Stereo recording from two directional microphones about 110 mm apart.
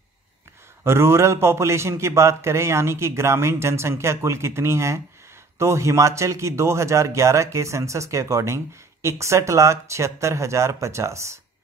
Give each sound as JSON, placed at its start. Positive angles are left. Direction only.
{"t": 0.8, "sound": "a man's voice", "side_deg": -25}